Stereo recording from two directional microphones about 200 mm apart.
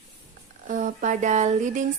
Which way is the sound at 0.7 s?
40° right (ahead or behind).